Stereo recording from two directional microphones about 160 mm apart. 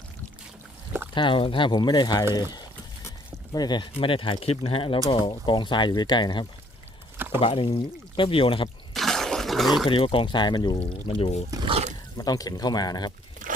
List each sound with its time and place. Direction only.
1.1 s speech: 30° left (ahead or behind)
2.5 s boiling: 25° left (ahead or behind)
3.5 s speech: 25° left (ahead or behind)
8.9 s a sound: centre (ahead or behind)
9.8 s speech: 30° left (ahead or behind)
11.1 s speech: 40° left (ahead or behind)
11.5 s a sound: 35° right (ahead or behind)
12.1 s speech: 25° left (ahead or behind)